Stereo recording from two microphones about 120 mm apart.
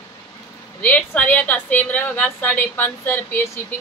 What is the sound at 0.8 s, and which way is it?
A woman's voice, 15° left (ahead or behind).